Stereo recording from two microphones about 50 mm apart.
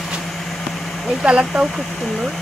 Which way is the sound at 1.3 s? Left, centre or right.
Centre.